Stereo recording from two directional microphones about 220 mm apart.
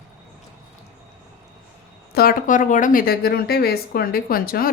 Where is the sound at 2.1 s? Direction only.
40° left (ahead or behind).